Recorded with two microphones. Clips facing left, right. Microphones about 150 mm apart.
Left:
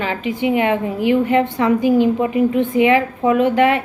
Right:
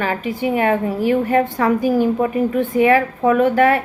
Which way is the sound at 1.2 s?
20° left (ahead or behind).